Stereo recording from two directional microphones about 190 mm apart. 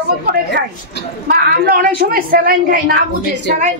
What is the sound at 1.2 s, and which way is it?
A woman's voice, 50° right (ahead or behind).